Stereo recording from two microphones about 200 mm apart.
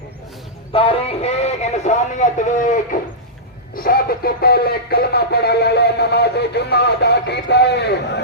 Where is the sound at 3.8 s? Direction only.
50° left (ahead or behind).